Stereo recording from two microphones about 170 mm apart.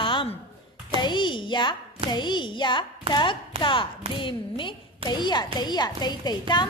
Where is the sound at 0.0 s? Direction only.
30° left (ahead or behind).